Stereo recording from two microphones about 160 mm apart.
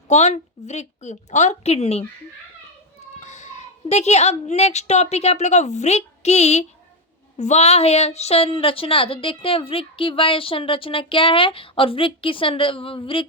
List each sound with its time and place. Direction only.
0.1 s a woman's voice: 45° left (ahead or behind)
3.2 s a woman's voice: 45° left (ahead or behind)